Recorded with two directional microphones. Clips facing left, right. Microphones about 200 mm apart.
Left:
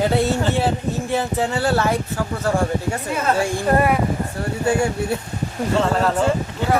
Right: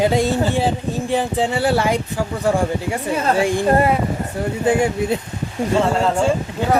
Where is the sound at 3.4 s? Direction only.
25° right (ahead or behind).